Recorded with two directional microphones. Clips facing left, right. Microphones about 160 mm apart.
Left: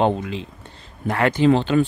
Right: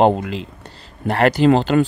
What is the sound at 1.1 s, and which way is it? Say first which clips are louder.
Speech: right 3 dB; 80° right.